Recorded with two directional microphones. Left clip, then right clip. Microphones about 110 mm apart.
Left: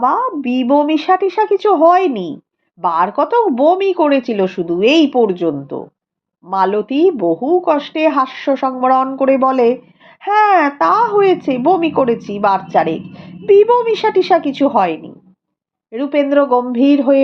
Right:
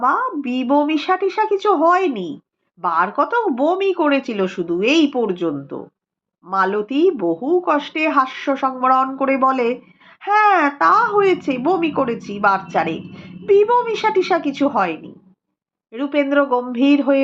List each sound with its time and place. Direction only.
0.0 s speech: 35° left (ahead or behind)